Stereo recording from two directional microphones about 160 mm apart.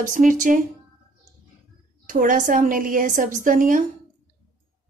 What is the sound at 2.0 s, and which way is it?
Speech, 55° right (ahead or behind).